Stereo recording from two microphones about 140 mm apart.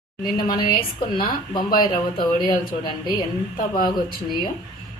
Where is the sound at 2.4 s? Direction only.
30° left (ahead or behind).